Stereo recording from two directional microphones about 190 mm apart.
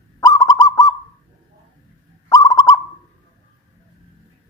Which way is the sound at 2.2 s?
20° left (ahead or behind).